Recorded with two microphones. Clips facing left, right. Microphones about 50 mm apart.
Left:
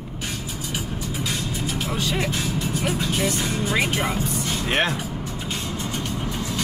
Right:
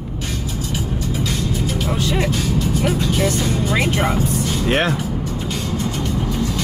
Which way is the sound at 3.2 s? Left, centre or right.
Centre.